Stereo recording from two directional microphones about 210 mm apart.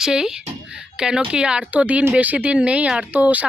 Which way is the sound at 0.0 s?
5° right (ahead or behind).